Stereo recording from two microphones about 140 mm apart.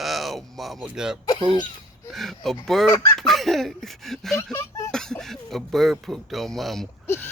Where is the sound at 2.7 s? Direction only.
5° left (ahead or behind).